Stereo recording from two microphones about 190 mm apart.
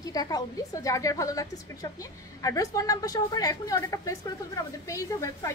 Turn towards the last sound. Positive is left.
turn(degrees=15)  # may be behind; listen again after turning